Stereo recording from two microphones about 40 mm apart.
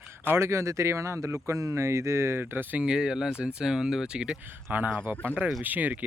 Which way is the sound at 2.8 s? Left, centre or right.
Right.